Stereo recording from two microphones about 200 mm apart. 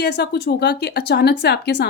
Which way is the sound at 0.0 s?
55° left (ahead or behind).